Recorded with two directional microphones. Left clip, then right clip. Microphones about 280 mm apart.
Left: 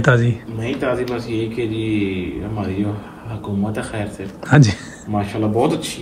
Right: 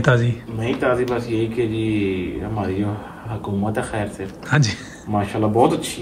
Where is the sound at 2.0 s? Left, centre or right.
Centre.